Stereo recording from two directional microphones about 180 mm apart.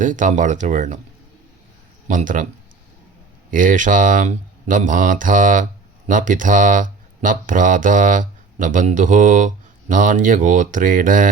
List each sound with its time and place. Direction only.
0.0 s speech: 45° right (ahead or behind)
2.0 s speech: 45° right (ahead or behind)
3.5 s speech: 45° right (ahead or behind)